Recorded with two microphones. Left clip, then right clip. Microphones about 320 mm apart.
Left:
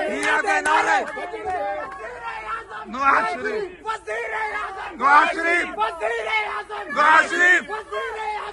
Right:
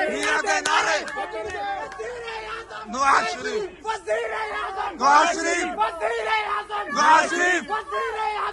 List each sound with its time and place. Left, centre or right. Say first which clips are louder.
0.0 s a sound: left 2 dB; centre
3.0 s a man's voice: left 1 dB; centre
3.8 s a man's voice: right 2 dB; right
5.0 s a man's voice: left 2 dB; centre